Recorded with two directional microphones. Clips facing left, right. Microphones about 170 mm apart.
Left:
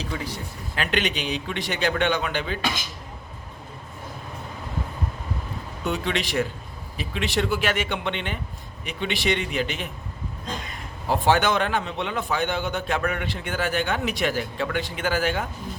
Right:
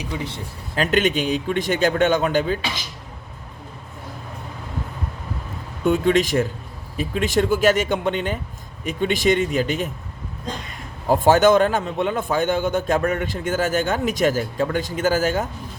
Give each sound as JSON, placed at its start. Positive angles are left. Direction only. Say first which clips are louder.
{"t": 0.0, "sound": "speech", "louder": "right 2 dB", "side_deg": -20}
{"t": 0.8, "sound": "speech", "louder": "right 7 dB", "side_deg": -45}
{"t": 2.6, "sound": "speech", "louder": "left 1 dB", "side_deg": 50}
{"t": 5.8, "sound": "speech", "louder": "right 9 dB", "side_deg": -45}
{"t": 11.1, "sound": "speech", "louder": "right 7 dB", "side_deg": -45}